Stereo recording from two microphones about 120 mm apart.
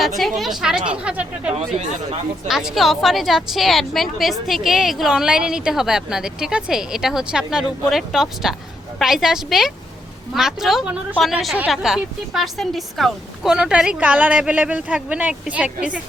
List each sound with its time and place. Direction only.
0.2 s a woman's voice: centre (ahead or behind)